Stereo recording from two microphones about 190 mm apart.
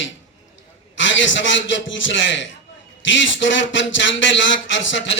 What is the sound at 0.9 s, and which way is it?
A man's voice, 75° left (ahead or behind).